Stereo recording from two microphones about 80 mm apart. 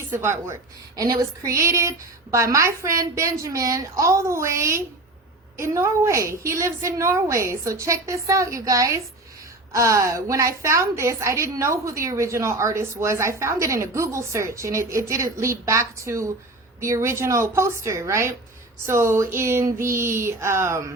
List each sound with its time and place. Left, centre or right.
0.2 s a woman's voice: right
0.9 s a woman's voice: right